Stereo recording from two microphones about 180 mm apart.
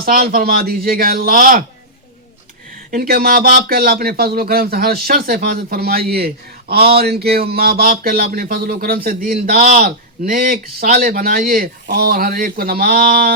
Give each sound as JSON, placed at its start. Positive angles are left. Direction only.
{"t": 0.0, "sound": "speech", "side_deg": -55}
{"t": 2.9, "sound": "speech", "side_deg": -55}